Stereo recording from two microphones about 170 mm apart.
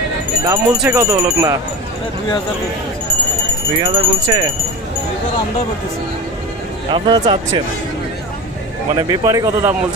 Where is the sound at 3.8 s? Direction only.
30° right (ahead or behind).